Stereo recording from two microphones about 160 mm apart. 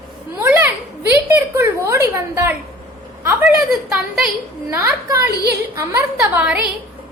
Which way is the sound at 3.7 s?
Centre (ahead or behind).